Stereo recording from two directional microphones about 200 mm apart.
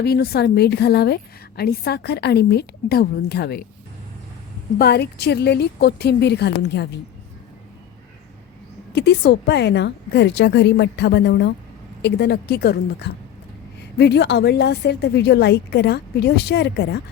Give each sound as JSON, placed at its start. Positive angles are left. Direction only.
{"t": 0.0, "sound": "a woman's voice", "side_deg": 55}
{"t": 4.8, "sound": "a woman's voice", "side_deg": 55}
{"t": 9.0, "sound": "a woman's voice", "side_deg": 55}